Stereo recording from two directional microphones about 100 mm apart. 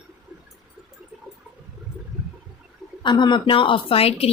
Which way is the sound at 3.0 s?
50° left (ahead or behind).